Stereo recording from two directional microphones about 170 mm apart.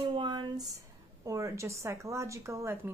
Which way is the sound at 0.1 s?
30° right (ahead or behind).